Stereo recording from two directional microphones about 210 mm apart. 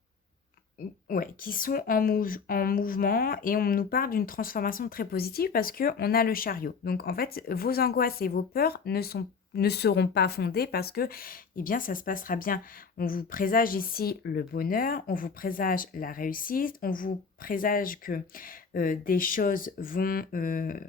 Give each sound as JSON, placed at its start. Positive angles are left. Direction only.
{"t": 1.0, "sound": "speech", "side_deg": 45}